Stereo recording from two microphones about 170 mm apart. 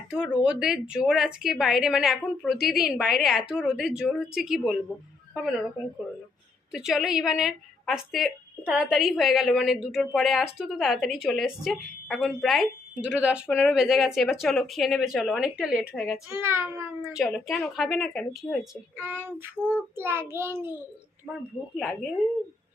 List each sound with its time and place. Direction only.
0.1 s a woman's voice: 5° right (ahead or behind)
6.7 s a woman's voice: 5° right (ahead or behind)
16.3 s speech: 15° right (ahead or behind)
17.3 s a woman's voice: centre (ahead or behind)
18.9 s speech: 10° right (ahead or behind)